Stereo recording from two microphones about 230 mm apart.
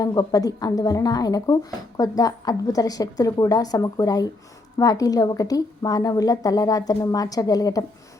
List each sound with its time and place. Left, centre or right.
0.0 s a woman's voice: centre